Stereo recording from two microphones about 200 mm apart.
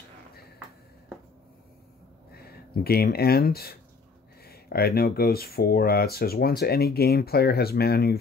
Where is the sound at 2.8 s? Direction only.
50° left (ahead or behind).